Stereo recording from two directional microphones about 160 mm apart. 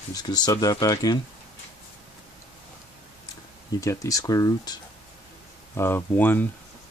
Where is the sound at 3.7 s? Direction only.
20° left (ahead or behind).